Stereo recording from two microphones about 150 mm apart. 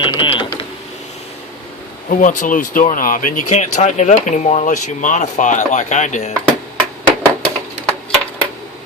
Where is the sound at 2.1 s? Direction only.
60° left (ahead or behind).